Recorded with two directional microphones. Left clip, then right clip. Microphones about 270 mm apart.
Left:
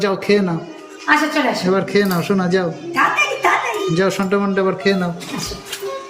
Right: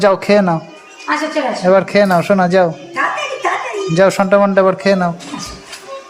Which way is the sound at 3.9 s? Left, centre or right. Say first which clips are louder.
Right 11 dB; centre.